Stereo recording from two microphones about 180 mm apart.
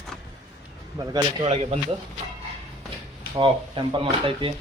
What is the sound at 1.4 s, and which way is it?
Speech, 35° right (ahead or behind).